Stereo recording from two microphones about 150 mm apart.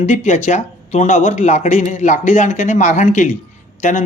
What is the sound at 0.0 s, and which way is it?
Speech, 50° left (ahead or behind).